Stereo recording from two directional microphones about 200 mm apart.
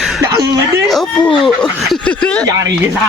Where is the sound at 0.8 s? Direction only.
Centre (ahead or behind).